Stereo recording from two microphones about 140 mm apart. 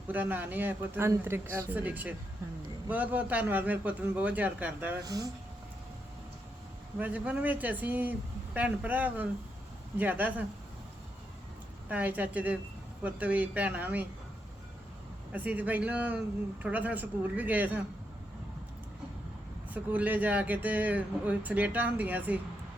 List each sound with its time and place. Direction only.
0.1 s speech: 10° right (ahead or behind)
5.0 s speech: 25° right (ahead or behind)
7.0 s speech: 10° right (ahead or behind)
11.9 s speech: 10° right (ahead or behind)
15.3 s speech: 10° right (ahead or behind)
19.7 s speech: 10° right (ahead or behind)